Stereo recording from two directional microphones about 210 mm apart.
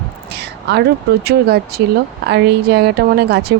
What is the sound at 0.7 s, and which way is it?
A woman's voice, 50° right (ahead or behind).